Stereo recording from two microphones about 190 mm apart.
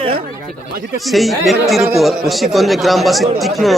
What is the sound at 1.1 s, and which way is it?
Speech, centre (ahead or behind).